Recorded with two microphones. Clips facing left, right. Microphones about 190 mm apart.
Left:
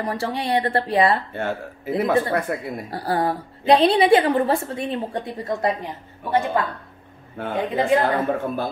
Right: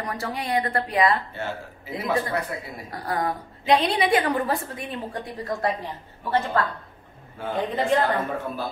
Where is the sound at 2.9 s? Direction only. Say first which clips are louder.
Left 4 dB; 30° left (ahead or behind); by 6.7 s 15° left (ahead or behind).